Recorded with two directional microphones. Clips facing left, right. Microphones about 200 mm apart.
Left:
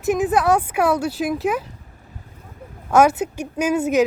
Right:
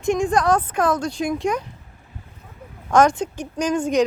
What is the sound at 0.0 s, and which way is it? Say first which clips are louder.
Speech: left 1 dB; 5° left (ahead or behind).